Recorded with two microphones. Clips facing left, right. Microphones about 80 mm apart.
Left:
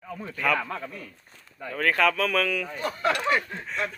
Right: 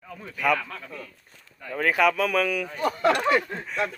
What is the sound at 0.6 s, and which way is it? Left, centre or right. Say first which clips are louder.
Speech: left 5 dB; left.